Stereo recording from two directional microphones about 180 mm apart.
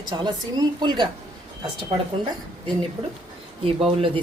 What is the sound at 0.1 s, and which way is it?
Speech, 25° right (ahead or behind).